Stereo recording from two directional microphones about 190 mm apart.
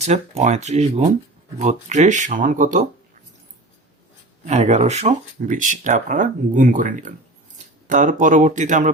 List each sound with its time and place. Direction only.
0.0 s speech: 35° right (ahead or behind)
4.4 s speech: 35° right (ahead or behind)